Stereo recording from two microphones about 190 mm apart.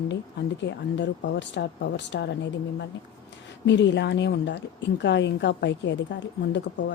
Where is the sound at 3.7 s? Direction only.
65° left (ahead or behind).